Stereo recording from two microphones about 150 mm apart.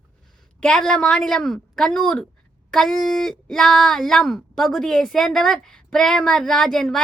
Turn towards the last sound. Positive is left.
turn(degrees=5)  # may be behind; listen again after turning